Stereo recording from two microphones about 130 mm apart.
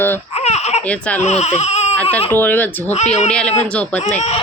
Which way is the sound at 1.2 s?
55° left (ahead or behind).